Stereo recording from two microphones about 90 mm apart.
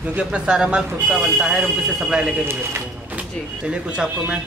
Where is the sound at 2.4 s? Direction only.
30° right (ahead or behind).